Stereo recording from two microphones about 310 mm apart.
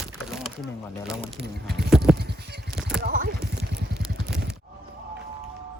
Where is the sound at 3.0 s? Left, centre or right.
Right.